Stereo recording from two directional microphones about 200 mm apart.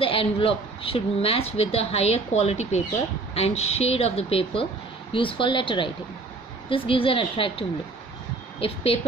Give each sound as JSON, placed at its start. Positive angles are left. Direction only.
{"t": 0.0, "sound": "a woman's voice", "side_deg": 25}